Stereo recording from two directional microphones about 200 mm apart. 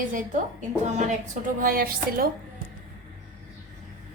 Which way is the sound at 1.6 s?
50° right (ahead or behind).